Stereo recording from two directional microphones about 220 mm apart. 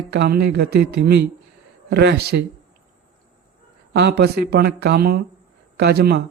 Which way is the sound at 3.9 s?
50° right (ahead or behind).